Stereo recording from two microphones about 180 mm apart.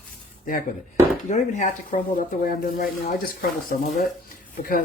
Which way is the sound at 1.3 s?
45° left (ahead or behind).